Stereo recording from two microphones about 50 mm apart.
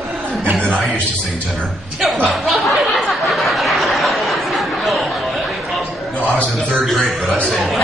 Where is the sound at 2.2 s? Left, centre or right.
Centre.